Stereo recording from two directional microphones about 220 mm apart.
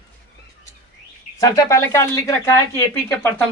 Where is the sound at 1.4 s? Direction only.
15° left (ahead or behind).